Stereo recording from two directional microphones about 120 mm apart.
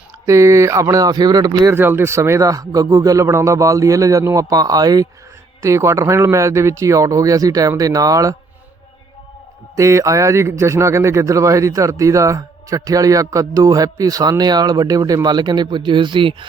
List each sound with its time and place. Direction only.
0.3 s speech: 25° right (ahead or behind)
1.7 s speech: 20° right (ahead or behind)
9.7 s speech: 25° right (ahead or behind); by 16.5 s 40° right (ahead or behind)